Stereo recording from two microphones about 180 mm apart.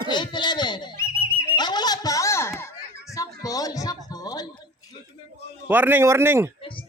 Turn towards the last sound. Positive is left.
turn(degrees=-15)  # may be behind; listen again after turning